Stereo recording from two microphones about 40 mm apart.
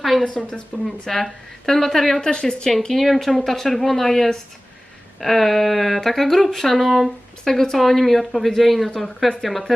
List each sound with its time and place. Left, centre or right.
0.0 s a woman's voice: centre
2.3 s speech: centre
2.8 s speech: centre
7.4 s speech: centre